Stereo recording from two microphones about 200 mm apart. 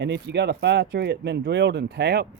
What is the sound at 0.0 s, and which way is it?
Speech, 60° right (ahead or behind).